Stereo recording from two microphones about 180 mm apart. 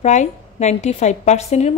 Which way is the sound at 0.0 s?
40° left (ahead or behind).